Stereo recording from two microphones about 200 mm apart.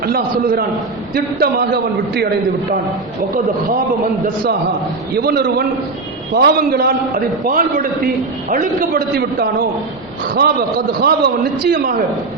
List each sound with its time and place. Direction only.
0.0 s a man's voice: 45° right (ahead or behind)
5.1 s a man's voice: 50° right (ahead or behind)